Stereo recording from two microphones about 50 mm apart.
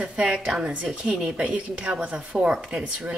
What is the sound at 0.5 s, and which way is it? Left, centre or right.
A woman's voice, centre.